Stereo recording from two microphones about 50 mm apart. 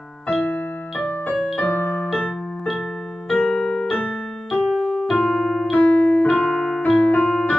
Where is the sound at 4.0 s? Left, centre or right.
Centre.